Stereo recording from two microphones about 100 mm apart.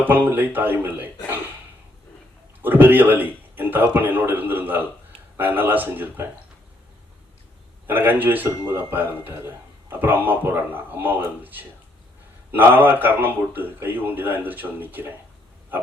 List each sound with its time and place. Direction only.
0.0 s speech: 20° right (ahead or behind)
2.6 s speech: 20° right (ahead or behind)
7.9 s speech: 20° right (ahead or behind)